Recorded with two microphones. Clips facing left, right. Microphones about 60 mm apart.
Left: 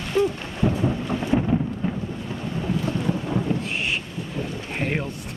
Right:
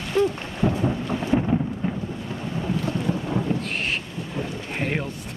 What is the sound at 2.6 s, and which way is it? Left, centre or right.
Boat, centre.